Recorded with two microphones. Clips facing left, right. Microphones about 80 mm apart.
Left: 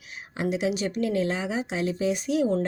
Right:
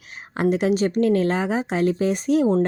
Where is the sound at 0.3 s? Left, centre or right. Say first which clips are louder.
Right 7 dB; right.